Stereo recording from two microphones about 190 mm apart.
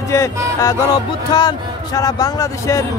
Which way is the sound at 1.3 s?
20° left (ahead or behind).